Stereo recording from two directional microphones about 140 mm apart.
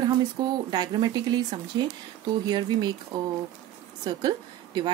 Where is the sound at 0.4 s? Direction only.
30° right (ahead or behind).